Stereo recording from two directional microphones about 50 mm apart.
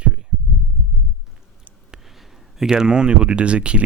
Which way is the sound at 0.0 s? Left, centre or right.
Centre.